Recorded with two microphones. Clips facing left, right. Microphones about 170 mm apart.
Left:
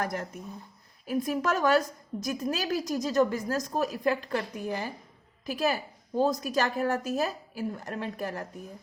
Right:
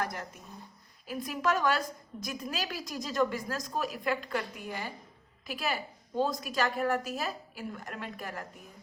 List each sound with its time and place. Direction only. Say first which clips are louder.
0.0 s a woman's voice: left 4 dB; 50° left (ahead or behind)